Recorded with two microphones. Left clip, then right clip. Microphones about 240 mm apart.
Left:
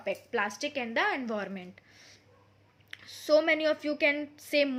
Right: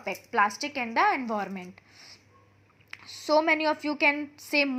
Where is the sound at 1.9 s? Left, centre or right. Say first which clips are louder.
Right 4 dB; centre.